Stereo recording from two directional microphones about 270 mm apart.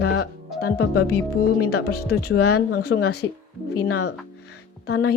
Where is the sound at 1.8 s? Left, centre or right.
Left.